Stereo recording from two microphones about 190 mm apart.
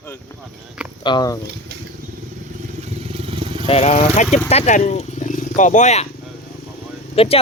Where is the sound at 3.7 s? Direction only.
35° left (ahead or behind).